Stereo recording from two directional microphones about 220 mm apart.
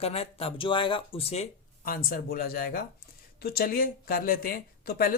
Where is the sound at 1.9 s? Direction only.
40° left (ahead or behind).